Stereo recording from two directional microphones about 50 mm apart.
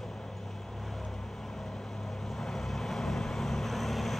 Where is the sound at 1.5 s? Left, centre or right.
Centre.